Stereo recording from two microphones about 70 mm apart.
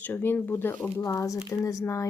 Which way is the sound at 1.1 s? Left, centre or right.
Left.